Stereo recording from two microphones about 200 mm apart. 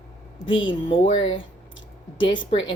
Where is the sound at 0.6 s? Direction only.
25° left (ahead or behind).